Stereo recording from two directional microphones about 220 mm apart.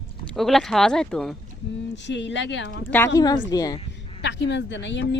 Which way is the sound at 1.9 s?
55° left (ahead or behind).